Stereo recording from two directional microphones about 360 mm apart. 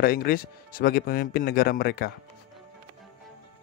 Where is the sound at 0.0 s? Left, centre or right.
Left.